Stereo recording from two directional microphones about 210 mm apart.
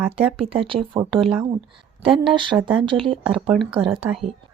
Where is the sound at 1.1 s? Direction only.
Centre (ahead or behind).